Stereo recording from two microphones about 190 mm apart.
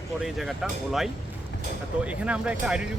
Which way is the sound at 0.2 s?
Centre (ahead or behind).